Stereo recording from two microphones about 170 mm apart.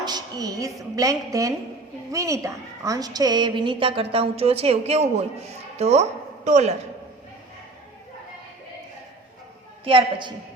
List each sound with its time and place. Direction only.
0.0 s a woman's voice: 25° right (ahead or behind); by 6.7 s 40° right (ahead or behind)
9.8 s a woman's voice: 30° right (ahead or behind)